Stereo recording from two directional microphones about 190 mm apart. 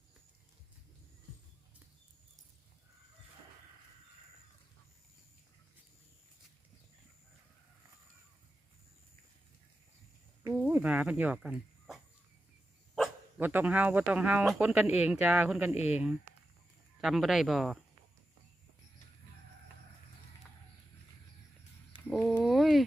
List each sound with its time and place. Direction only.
10.5 s speech: 5° right (ahead or behind)
13.0 s speech: 10° right (ahead or behind)
15.7 s speech: 35° left (ahead or behind)
17.0 s speech: centre (ahead or behind)
22.0 s a sound: centre (ahead or behind)